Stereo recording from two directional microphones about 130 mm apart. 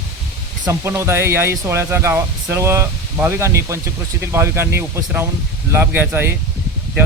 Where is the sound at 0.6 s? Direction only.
20° right (ahead or behind).